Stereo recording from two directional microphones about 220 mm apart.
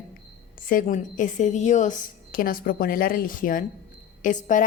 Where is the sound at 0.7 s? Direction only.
40° left (ahead or behind).